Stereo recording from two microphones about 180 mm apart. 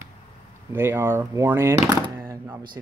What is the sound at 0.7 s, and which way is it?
Speech, 15° right (ahead or behind).